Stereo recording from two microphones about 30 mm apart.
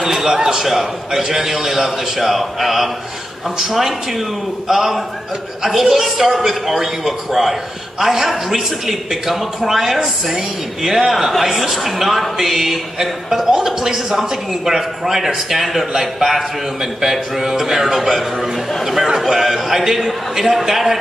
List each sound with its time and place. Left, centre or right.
0.0 s a man's voice: centre
0.7 s a man's voice: centre